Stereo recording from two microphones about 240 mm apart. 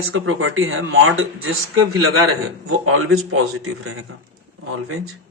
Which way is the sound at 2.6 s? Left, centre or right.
Right.